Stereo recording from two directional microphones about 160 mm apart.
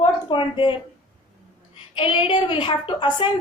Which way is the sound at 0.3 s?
30° left (ahead or behind).